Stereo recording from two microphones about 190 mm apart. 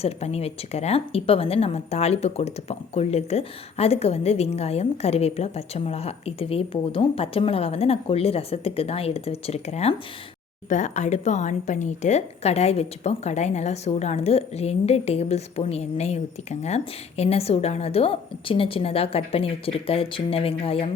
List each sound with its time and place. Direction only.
0.0 s a woman's voice: 35° left (ahead or behind)